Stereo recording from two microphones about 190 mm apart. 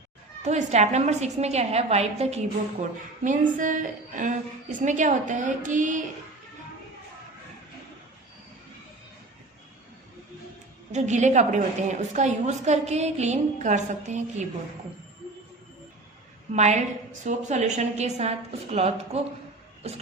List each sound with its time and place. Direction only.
0.4 s a woman's voice: 35° right (ahead or behind)
10.9 s a woman's voice: 40° right (ahead or behind)
16.5 s a woman's voice: 35° right (ahead or behind)